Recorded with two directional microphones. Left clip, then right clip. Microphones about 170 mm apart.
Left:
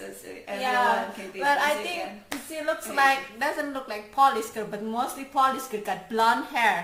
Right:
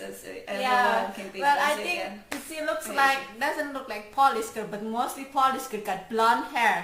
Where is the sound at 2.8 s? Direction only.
15° left (ahead or behind).